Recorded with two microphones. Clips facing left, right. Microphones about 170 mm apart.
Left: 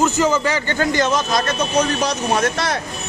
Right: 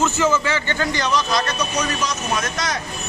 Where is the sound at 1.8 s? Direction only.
60° left (ahead or behind).